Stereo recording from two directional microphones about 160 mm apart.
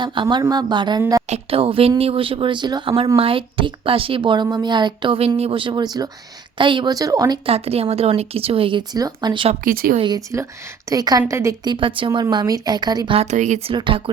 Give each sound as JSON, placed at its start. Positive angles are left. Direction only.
{"t": 0.0, "sound": "a woman's voice", "side_deg": -30}
{"t": 1.3, "sound": "a woman's voice", "side_deg": -35}
{"t": 7.4, "sound": "a woman's voice", "side_deg": -40}
{"t": 9.6, "sound": "speech", "side_deg": -65}
{"t": 10.0, "sound": "a woman's voice", "side_deg": -25}
{"t": 13.3, "sound": "speech", "side_deg": -50}
{"t": 13.7, "sound": "a woman's voice", "side_deg": -30}